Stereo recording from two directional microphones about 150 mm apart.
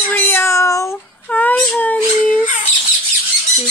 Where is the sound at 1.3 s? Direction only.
10° left (ahead or behind).